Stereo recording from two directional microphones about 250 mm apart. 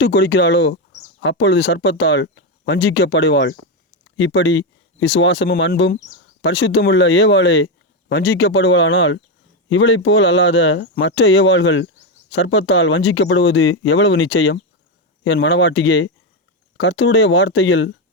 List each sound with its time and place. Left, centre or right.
0.0 s speech: left